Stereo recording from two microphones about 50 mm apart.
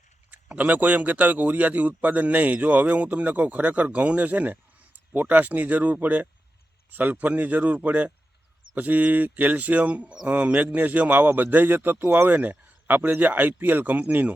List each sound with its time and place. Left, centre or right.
0.5 s a man's voice: right